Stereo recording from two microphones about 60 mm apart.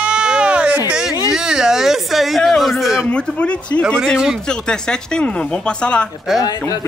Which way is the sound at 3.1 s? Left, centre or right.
Centre.